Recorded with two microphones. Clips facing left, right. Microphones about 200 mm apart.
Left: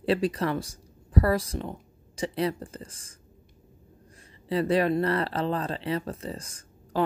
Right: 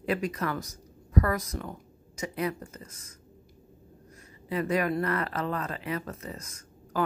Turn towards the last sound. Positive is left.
turn(degrees=30)  # may be behind; listen again after turning